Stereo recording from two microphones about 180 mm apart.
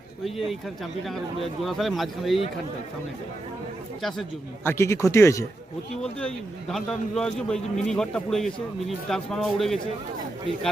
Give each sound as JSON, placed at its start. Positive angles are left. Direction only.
{"t": 0.3, "sound": "a man's voice", "side_deg": 0}
{"t": 1.6, "sound": "a man's voice", "side_deg": 0}
{"t": 4.6, "sound": "speech", "side_deg": 15}
{"t": 6.0, "sound": "a man's voice", "side_deg": 5}